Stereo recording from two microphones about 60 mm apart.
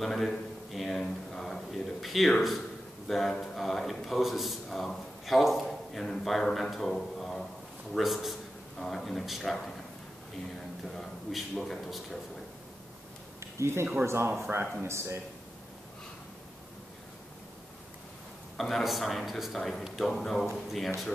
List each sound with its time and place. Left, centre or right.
0.0 s a man's voice: centre
11.0 s a man's voice: centre
13.6 s speech: right
18.6 s a man's voice: centre